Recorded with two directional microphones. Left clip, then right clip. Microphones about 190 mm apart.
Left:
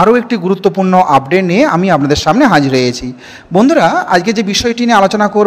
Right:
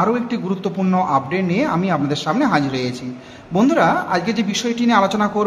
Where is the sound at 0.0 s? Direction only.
45° left (ahead or behind).